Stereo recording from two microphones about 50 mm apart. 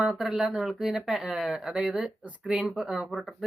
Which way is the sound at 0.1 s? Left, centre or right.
Centre.